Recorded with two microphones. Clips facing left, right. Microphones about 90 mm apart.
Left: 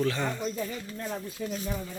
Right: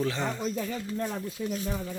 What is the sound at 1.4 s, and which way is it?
Speech, 55° left (ahead or behind).